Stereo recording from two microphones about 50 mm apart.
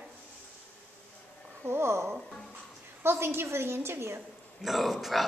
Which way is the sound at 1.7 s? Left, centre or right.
Right.